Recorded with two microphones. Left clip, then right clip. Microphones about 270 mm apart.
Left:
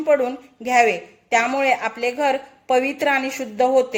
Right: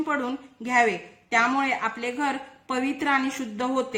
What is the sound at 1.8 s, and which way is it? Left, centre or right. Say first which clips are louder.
Speech: left 6 dB; right.